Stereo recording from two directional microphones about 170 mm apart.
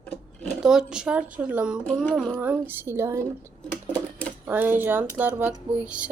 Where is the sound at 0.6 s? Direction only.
5° right (ahead or behind).